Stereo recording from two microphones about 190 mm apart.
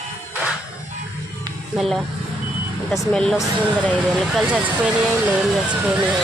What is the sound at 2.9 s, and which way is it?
Speech, centre (ahead or behind).